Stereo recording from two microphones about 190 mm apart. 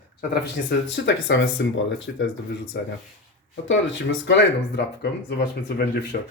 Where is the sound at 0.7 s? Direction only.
65° left (ahead or behind).